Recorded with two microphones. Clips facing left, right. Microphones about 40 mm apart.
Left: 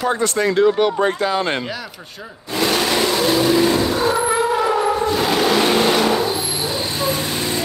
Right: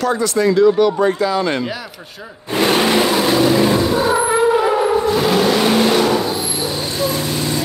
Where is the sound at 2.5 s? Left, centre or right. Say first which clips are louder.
Right 4 dB; right.